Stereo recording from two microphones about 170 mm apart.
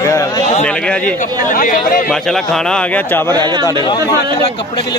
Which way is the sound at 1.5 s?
50° left (ahead or behind).